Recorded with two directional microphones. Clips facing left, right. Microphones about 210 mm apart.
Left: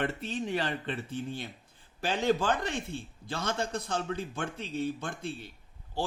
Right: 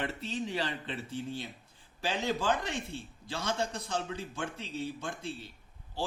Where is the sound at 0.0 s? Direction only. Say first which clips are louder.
Left 3 dB; 55° left (ahead or behind).